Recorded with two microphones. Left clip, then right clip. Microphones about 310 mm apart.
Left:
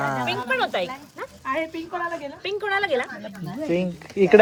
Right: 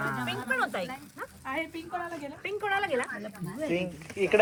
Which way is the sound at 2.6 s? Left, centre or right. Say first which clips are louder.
Left 6 dB; left.